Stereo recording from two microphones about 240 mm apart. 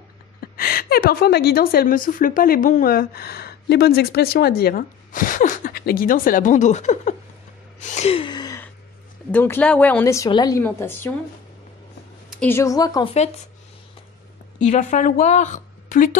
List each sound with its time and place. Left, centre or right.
0.4 s a woman's voice: left
7.8 s gasp: left
9.3 s speech: centre
12.3 s speech: centre
14.6 s a woman's voice: left